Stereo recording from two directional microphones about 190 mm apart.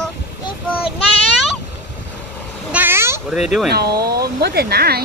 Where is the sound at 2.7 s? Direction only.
10° right (ahead or behind).